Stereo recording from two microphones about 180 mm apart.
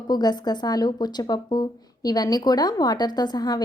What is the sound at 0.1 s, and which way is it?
Speech, 25° left (ahead or behind).